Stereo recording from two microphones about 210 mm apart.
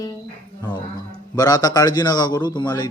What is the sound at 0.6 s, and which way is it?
A man's voice, 20° left (ahead or behind).